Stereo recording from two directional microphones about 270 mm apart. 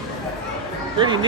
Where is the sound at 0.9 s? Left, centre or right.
Centre.